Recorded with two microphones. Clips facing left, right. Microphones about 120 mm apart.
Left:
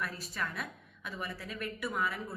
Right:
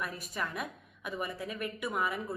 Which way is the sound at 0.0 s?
15° right (ahead or behind).